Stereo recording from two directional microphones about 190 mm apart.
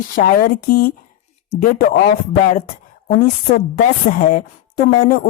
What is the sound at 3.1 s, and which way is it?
A woman's voice, 55° left (ahead or behind).